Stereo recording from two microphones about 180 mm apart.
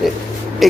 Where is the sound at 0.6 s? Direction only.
Centre (ahead or behind).